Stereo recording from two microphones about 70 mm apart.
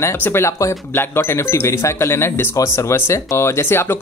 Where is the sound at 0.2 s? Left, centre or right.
Left.